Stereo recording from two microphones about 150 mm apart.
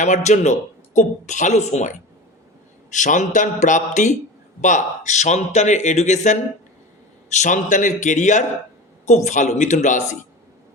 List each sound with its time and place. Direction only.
0.0 s a man's voice: 50° left (ahead or behind)